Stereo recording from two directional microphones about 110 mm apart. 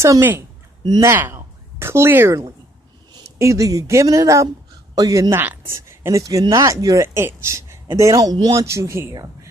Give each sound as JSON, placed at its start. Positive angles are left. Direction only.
{"t": 0.0, "sound": "a woman's voice", "side_deg": -20}
{"t": 5.3, "sound": "speech", "side_deg": -20}
{"t": 8.6, "sound": "a woman's voice", "side_deg": -25}